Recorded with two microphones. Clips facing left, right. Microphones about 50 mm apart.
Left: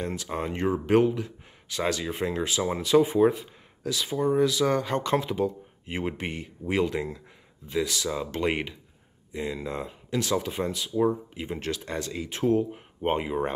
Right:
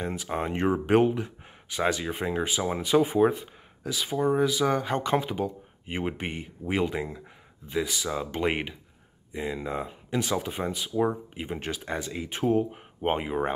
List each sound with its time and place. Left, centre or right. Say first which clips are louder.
0.0 s speech: right 1 dB; centre